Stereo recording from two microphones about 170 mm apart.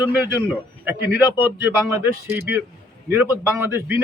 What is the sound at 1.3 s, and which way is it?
A man's voice, 15° right (ahead or behind).